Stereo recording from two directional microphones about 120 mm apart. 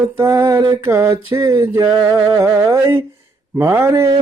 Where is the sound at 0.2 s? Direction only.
25° right (ahead or behind).